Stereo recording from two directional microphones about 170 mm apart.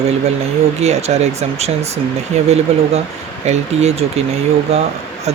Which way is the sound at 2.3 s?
40° right (ahead or behind).